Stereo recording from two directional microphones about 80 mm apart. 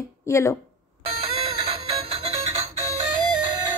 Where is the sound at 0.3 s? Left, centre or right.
Left.